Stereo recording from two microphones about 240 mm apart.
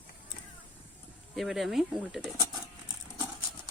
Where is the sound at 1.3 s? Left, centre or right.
Centre.